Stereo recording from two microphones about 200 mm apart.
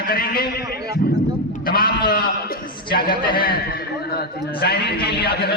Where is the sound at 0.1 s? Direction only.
50° left (ahead or behind).